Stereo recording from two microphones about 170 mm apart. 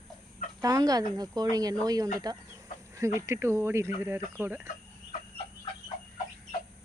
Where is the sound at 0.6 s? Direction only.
20° right (ahead or behind).